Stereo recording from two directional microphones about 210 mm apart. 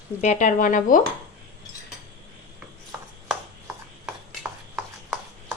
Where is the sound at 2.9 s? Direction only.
5° right (ahead or behind).